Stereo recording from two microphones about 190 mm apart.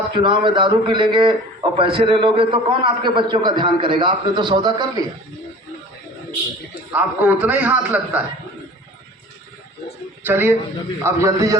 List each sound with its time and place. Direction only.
0.2 s a man's voice: 25° right (ahead or behind)
6.9 s a man's voice: 10° right (ahead or behind)
10.2 s a man's voice: 10° right (ahead or behind)